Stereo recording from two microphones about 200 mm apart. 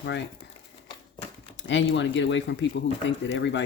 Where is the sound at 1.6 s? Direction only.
65° left (ahead or behind).